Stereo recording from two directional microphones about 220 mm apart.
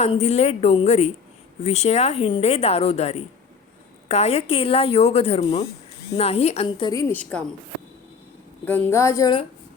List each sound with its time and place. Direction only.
0.0 s a woman's voice: 30° left (ahead or behind); by 7.4 s 5° left (ahead or behind)
8.6 s a woman's voice: 10° left (ahead or behind)